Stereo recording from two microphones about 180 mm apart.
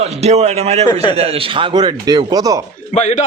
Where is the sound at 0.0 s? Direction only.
35° right (ahead or behind).